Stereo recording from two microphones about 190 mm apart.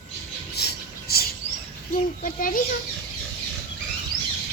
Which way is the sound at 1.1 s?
55° left (ahead or behind).